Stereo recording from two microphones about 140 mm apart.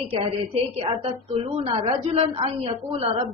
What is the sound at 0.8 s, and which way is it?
A woman's voice, 45° right (ahead or behind).